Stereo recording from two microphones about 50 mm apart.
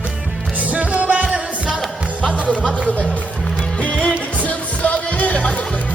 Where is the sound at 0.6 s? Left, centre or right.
Right.